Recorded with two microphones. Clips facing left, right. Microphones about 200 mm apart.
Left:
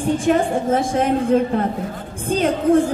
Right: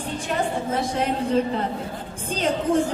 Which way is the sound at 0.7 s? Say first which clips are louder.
Left 6 dB; 50° left (ahead or behind).